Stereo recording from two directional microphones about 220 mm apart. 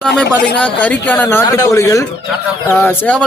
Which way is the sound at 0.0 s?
5° left (ahead or behind).